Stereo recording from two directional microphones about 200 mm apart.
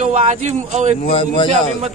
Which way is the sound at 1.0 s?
30° left (ahead or behind).